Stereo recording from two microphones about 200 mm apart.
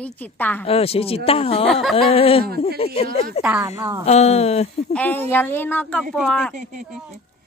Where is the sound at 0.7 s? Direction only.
30° left (ahead or behind).